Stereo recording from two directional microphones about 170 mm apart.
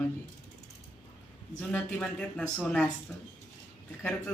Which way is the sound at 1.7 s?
5° left (ahead or behind).